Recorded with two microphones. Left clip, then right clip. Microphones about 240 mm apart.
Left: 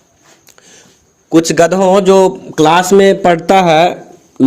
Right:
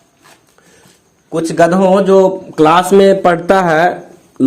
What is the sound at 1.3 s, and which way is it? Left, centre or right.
A man's voice, left.